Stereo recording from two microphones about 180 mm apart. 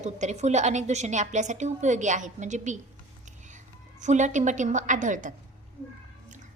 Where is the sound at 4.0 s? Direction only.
40° right (ahead or behind).